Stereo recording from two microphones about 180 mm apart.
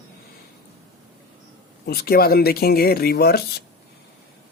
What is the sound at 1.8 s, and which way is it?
Speech, 60° left (ahead or behind).